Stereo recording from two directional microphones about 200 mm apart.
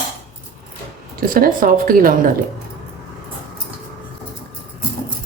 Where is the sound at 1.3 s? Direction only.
45° right (ahead or behind).